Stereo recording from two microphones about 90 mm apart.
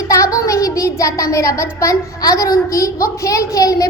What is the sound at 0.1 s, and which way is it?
A child's voice, 40° left (ahead or behind).